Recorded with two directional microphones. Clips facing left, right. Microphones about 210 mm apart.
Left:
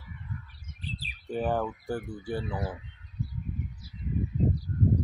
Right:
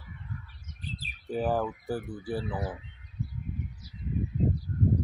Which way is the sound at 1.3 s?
5° right (ahead or behind).